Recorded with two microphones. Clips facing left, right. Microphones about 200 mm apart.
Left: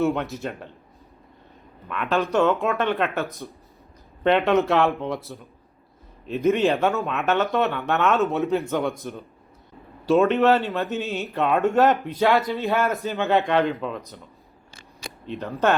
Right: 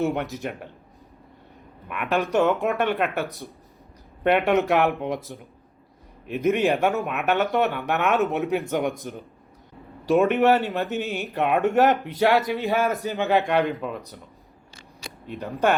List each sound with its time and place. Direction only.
0.0 s speech: 15° right (ahead or behind)
1.9 s speech: 15° right (ahead or behind)
15.3 s speech: 15° right (ahead or behind)